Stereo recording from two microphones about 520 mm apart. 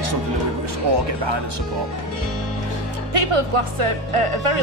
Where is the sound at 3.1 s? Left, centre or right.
Right.